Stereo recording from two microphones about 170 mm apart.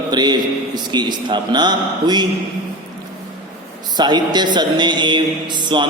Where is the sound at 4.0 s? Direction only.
25° right (ahead or behind).